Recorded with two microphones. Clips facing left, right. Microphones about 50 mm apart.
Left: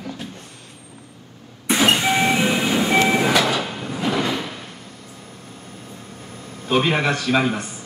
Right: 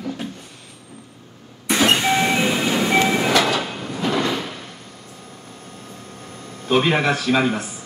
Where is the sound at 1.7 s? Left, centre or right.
Centre.